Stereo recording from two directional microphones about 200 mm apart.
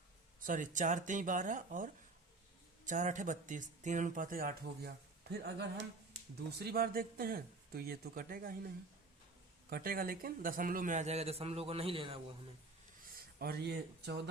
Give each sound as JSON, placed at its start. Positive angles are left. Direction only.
{"t": 0.4, "sound": "speech", "side_deg": -40}
{"t": 9.6, "sound": "speech", "side_deg": -45}
{"t": 13.4, "sound": "speech", "side_deg": -50}